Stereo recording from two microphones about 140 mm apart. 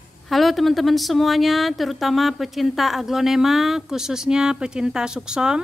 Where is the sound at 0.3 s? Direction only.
Centre (ahead or behind).